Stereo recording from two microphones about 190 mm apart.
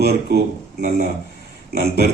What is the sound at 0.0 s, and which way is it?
A man's voice, 55° right (ahead or behind).